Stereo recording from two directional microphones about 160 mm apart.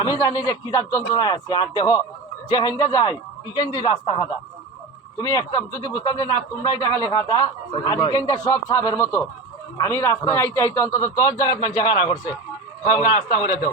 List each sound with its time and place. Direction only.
0.0 s a man's voice: 20° left (ahead or behind); by 13.6 s 40° left (ahead or behind)